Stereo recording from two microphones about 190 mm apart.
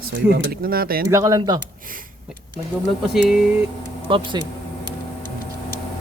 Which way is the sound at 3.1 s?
5° right (ahead or behind).